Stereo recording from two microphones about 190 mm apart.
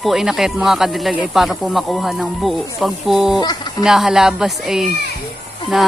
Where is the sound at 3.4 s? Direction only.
20° left (ahead or behind).